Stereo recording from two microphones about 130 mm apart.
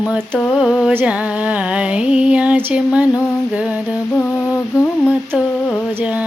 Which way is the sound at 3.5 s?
10° right (ahead or behind).